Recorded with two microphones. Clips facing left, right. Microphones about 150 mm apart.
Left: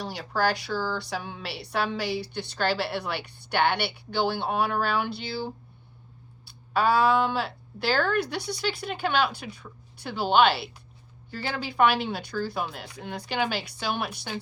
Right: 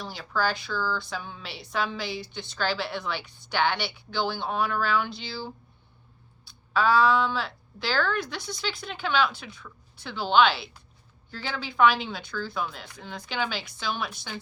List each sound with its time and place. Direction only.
0.0 s a woman's voice: 65° left (ahead or behind)
6.7 s a woman's voice: 60° left (ahead or behind)